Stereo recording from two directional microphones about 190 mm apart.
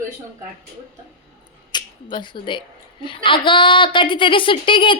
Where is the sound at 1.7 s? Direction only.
25° left (ahead or behind).